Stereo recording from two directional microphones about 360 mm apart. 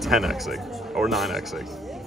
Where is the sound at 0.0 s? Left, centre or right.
Centre.